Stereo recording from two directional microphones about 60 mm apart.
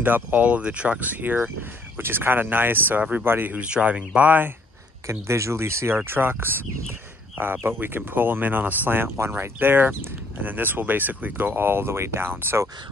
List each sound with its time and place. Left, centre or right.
0.0 s speech: right
3.5 s speech: right
5.2 s speech: right
6.9 s a sound: right
7.6 s speech: right